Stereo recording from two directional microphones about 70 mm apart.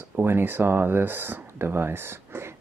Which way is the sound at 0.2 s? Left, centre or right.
Right.